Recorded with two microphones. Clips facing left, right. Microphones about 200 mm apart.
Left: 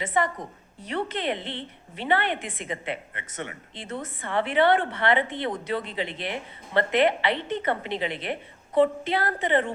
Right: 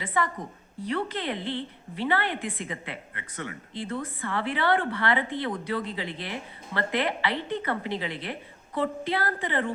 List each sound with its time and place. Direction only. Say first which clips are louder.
0.0 s a woman's voice: left 3 dB; 20° left (ahead or behind)